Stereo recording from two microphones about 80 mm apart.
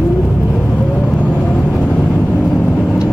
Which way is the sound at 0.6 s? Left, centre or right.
Centre.